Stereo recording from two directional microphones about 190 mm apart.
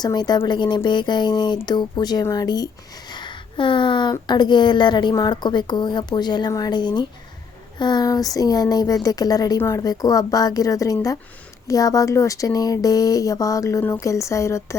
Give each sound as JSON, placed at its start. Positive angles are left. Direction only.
{"t": 0.0, "sound": "speech", "side_deg": 20}